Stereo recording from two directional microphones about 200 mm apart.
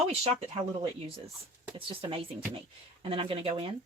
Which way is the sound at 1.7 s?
25° right (ahead or behind).